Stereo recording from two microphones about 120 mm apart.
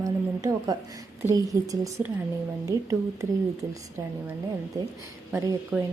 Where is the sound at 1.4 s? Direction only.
30° right (ahead or behind).